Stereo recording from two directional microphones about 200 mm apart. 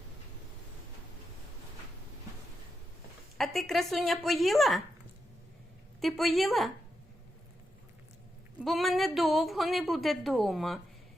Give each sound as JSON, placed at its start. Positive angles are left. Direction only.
{"t": 3.3, "sound": "a woman's voice", "side_deg": 0}
{"t": 6.0, "sound": "a woman's voice", "side_deg": 0}
{"t": 8.5, "sound": "a woman's voice", "side_deg": 0}